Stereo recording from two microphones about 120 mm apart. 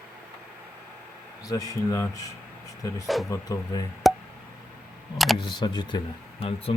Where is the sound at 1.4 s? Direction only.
30° left (ahead or behind).